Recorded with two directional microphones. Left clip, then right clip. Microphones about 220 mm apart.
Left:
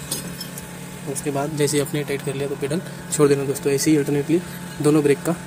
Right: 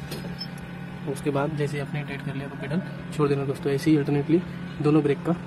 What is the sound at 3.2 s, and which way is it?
Speech, 10° left (ahead or behind).